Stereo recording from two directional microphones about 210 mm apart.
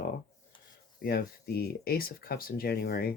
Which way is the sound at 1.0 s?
50° left (ahead or behind).